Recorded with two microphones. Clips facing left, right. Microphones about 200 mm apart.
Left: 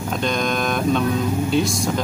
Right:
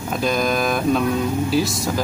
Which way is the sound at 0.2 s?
5° right (ahead or behind).